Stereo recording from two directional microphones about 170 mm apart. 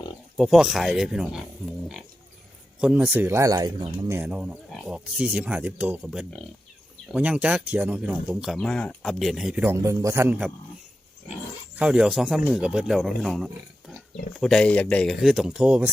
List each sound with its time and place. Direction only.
0.3 s speech: centre (ahead or behind)
2.8 s speech: 10° right (ahead or behind)
4.2 s speech: 5° right (ahead or behind)
9.7 s speech: 20° right (ahead or behind)
11.8 s speech: 5° right (ahead or behind)